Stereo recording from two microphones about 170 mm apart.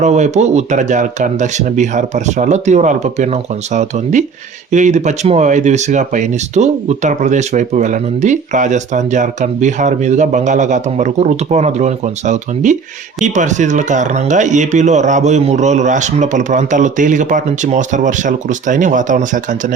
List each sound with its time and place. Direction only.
0.0 s speech: 45° right (ahead or behind)